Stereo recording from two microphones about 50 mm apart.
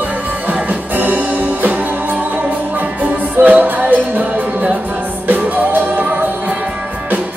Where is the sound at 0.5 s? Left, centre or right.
Right.